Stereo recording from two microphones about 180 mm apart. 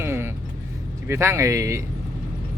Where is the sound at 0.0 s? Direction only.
15° right (ahead or behind).